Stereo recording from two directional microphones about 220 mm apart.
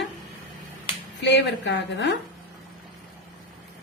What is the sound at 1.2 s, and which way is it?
Speech, 50° left (ahead or behind).